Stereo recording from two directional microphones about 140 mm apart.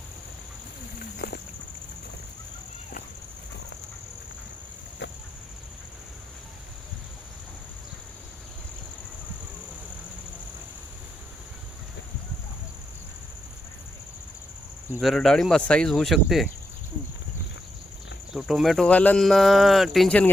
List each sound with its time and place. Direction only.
1.2 s a sound: 90° left
15.0 s speech: centre (ahead or behind)
18.3 s speech: centre (ahead or behind)